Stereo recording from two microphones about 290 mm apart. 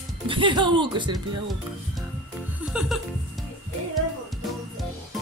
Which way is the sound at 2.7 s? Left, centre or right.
Centre.